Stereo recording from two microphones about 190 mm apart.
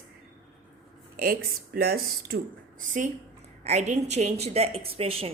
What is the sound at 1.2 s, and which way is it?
A woman's voice, 50° right (ahead or behind).